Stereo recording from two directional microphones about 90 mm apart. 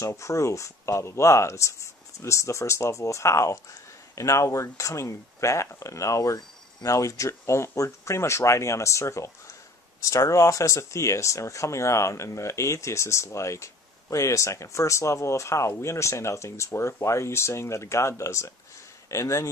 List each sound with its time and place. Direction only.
0.0 s speech: 35° left (ahead or behind)